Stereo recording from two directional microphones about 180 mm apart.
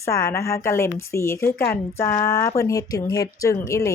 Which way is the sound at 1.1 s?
15° left (ahead or behind).